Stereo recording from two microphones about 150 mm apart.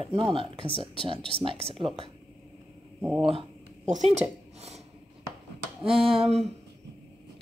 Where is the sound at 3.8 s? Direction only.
55° right (ahead or behind).